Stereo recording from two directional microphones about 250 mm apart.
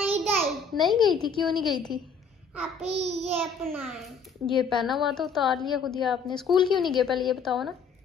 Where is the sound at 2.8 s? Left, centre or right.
Right.